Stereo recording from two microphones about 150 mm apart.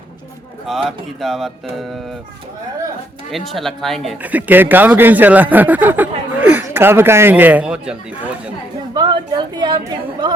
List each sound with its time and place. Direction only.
0.9 s speech: centre (ahead or behind)
3.3 s speech: centre (ahead or behind)
4.2 s speech: 10° right (ahead or behind)
9.0 s a woman's voice: 30° right (ahead or behind)